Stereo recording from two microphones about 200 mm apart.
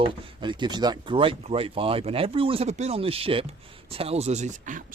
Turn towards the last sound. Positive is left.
turn(degrees=-40)  # may be behind; listen again after turning